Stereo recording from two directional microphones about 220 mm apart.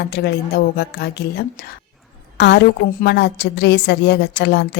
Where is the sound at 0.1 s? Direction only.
45° left (ahead or behind).